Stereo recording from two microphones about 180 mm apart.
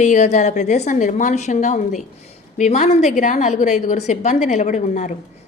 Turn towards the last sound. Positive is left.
turn(degrees=40)  # may be behind; listen again after turning